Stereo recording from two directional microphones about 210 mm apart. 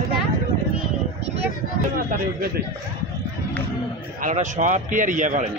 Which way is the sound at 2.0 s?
45° right (ahead or behind).